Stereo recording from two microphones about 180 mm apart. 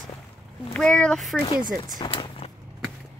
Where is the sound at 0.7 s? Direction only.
5° left (ahead or behind).